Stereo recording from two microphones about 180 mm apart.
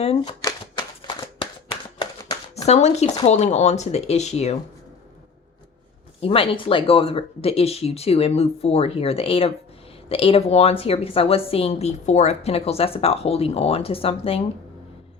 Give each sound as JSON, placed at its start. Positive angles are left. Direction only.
{"t": 0.0, "sound": "a woman's voice", "side_deg": 35}
{"t": 0.4, "sound": "shuffling cards", "side_deg": 25}
{"t": 2.6, "sound": "a woman's voice", "side_deg": 40}
{"t": 6.2, "sound": "a woman's voice", "side_deg": 30}